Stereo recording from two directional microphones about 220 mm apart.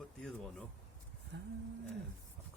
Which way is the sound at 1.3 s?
55° right (ahead or behind).